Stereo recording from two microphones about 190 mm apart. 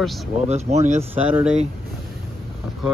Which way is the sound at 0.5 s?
35° right (ahead or behind).